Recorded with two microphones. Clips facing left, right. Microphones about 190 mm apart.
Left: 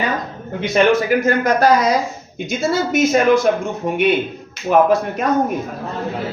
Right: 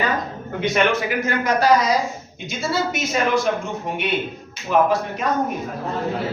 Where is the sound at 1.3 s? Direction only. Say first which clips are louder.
Left 1 dB; 45° left (ahead or behind).